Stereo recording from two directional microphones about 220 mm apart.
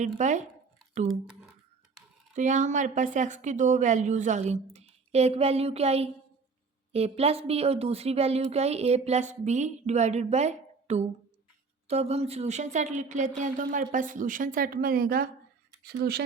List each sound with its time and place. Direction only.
0.2 s a woman's voice: 35° right (ahead or behind)
2.3 s a woman's voice: 35° right (ahead or behind)